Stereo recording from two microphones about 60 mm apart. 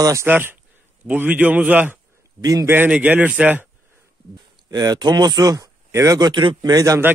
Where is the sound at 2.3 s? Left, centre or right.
Right.